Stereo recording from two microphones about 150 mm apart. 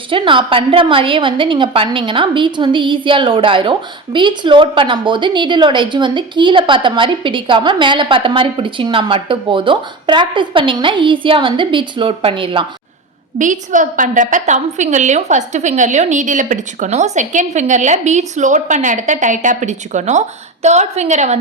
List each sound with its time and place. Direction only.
0.1 s a woman's voice: 35° right (ahead or behind)
13.4 s a woman's voice: 55° right (ahead or behind)